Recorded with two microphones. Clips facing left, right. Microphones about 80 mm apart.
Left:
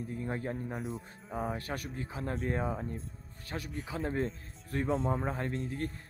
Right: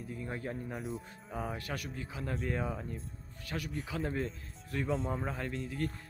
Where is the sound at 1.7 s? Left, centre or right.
Left.